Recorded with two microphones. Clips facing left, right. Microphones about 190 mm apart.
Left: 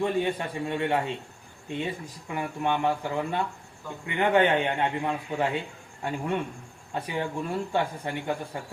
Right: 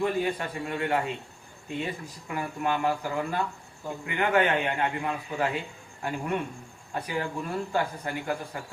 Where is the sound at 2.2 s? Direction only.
20° left (ahead or behind).